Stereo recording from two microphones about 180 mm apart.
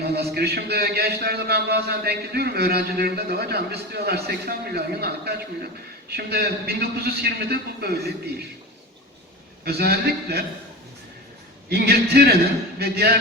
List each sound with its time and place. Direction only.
0.0 s a man's voice: 65° right (ahead or behind)
9.6 s a man's voice: 60° right (ahead or behind)
11.7 s a man's voice: 60° right (ahead or behind)